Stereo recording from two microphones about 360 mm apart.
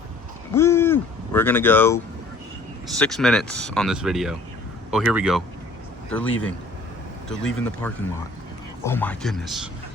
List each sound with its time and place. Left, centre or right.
0.5 s speech: centre
3.0 s speech: centre
6.2 s speech: left
7.3 s speech: centre